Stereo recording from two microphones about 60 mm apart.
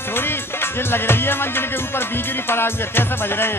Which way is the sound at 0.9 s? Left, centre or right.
Left.